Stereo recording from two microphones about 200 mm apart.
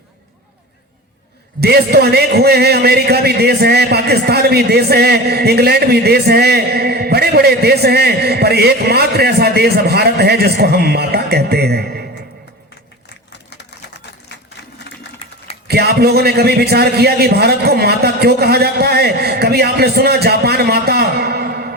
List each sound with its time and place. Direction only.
1.6 s speech: 55° right (ahead or behind)
14.9 s sewing machine: 60° left (ahead or behind)
15.6 s speech: 50° right (ahead or behind)